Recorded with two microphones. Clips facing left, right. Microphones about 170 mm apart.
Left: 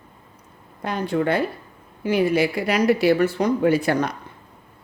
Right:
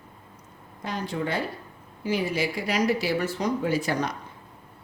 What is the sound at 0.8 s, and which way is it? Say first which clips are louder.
Speech: left 7 dB; 60° left (ahead or behind).